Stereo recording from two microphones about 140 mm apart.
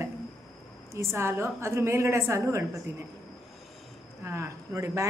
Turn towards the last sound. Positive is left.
turn(degrees=-20)  # may be behind; listen again after turning